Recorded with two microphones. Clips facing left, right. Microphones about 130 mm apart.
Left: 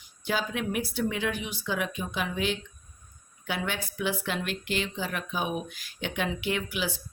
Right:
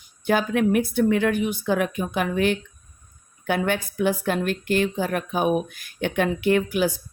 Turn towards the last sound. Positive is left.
turn(degrees=-50)  # may be behind; listen again after turning